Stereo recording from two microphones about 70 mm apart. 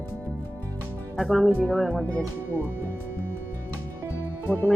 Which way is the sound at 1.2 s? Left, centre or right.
Centre.